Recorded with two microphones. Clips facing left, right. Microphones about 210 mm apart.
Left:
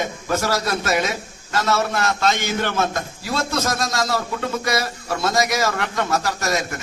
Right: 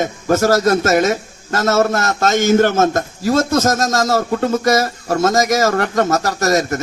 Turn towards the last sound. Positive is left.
turn(degrees=-40)  # may be behind; listen again after turning